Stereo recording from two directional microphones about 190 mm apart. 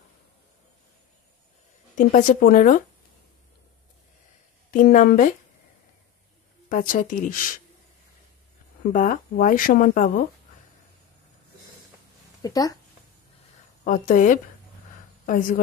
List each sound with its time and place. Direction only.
2.0 s speech: 45° left (ahead or behind)
4.6 s speech: 50° left (ahead or behind)
6.7 s speech: 45° left (ahead or behind)
8.9 s speech: 45° left (ahead or behind)
12.4 s speech: 20° left (ahead or behind)
13.8 s speech: 45° left (ahead or behind)